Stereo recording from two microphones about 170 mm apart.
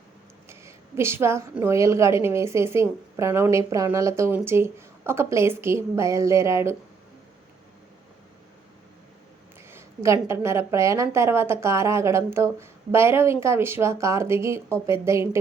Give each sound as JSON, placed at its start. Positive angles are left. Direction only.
{"t": 0.4, "sound": "a woman's voice", "side_deg": -15}
{"t": 9.6, "sound": "a woman's voice", "side_deg": -15}